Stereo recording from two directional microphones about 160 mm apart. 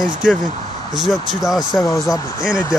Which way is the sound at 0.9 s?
Centre (ahead or behind).